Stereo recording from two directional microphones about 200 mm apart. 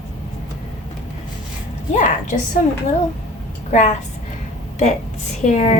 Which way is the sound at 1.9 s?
35° left (ahead or behind).